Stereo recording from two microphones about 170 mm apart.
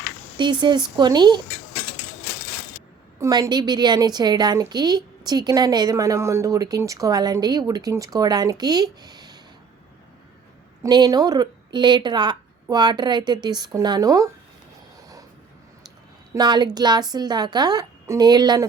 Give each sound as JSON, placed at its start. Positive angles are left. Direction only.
{"t": 0.3, "sound": "a woman's voice", "side_deg": -25}
{"t": 3.2, "sound": "a woman's voice", "side_deg": -20}
{"t": 10.8, "sound": "a woman's voice", "side_deg": -25}
{"t": 16.3, "sound": "a woman's voice", "side_deg": -25}